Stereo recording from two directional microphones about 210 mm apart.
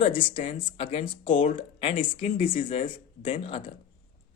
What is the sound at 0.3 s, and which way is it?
Speech, 30° left (ahead or behind).